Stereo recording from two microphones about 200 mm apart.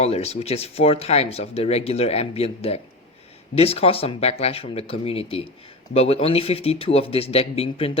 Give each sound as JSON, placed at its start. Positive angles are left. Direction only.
{"t": 0.0, "sound": "speech", "side_deg": 30}